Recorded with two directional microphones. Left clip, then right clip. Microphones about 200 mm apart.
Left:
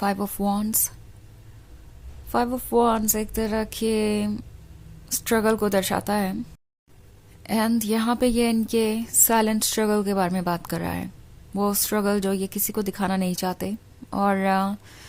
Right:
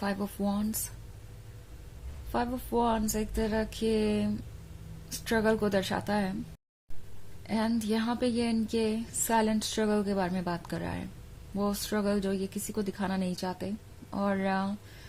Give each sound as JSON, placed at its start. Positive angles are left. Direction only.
{"t": 0.0, "sound": "speech", "side_deg": 35}
{"t": 2.3, "sound": "speech", "side_deg": 35}
{"t": 7.4, "sound": "speech", "side_deg": 35}